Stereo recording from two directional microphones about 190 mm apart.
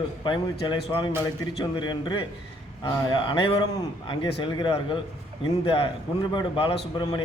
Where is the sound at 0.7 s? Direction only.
25° left (ahead or behind).